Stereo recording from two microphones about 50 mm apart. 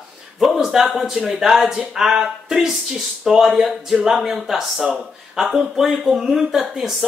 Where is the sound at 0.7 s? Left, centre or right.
Centre.